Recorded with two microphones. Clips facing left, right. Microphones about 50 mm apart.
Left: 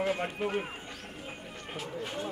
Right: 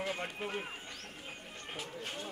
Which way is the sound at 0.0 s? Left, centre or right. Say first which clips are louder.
Left 7 dB; centre.